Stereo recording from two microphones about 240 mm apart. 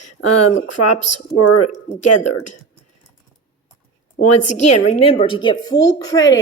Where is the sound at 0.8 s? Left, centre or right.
Left.